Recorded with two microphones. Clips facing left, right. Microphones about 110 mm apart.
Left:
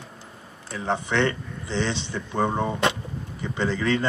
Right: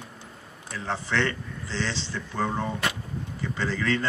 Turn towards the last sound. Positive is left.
turn(degrees=15)  # may be behind; listen again after turning